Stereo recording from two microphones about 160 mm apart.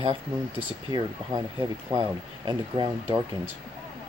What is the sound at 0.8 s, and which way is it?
Speech, 25° right (ahead or behind).